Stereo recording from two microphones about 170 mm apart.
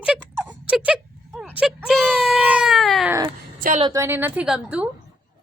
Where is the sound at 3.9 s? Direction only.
15° right (ahead or behind).